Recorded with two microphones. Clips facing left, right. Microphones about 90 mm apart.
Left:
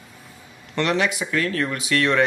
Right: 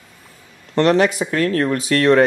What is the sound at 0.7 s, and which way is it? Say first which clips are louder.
Speech: right 7 dB; 40° right (ahead or behind).